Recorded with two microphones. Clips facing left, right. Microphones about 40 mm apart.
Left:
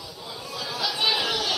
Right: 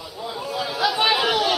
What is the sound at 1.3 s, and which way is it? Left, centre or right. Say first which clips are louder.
Chatter: right 7 dB; right.